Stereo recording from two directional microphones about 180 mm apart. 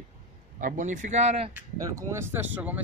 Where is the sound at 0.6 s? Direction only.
45° right (ahead or behind).